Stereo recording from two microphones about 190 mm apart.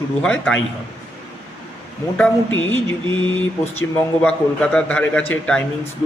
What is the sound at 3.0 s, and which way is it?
Mantra, 25° right (ahead or behind).